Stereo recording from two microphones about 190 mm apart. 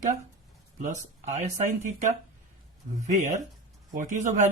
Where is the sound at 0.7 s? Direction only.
40° right (ahead or behind).